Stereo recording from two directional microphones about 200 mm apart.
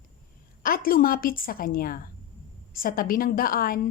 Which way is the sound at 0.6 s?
45° left (ahead or behind).